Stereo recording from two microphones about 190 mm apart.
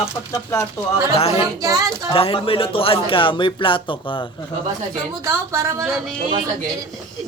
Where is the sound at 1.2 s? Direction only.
30° left (ahead or behind).